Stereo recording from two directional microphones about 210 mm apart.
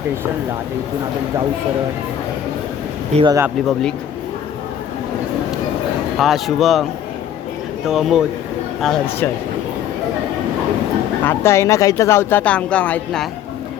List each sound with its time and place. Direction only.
3.2 s speech: 20° right (ahead or behind)
3.4 s speech: centre (ahead or behind)
6.1 s speech: centre (ahead or behind)
7.9 s speech: centre (ahead or behind)
11.2 s speech: 10° left (ahead or behind)